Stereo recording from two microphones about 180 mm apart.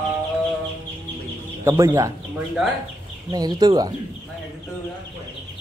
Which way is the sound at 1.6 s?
15° right (ahead or behind).